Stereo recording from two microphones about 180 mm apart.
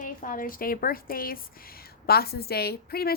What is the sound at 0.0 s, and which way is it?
A woman's voice, 50° left (ahead or behind).